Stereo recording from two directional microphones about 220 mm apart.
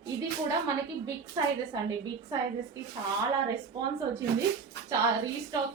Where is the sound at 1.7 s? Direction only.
20° right (ahead or behind).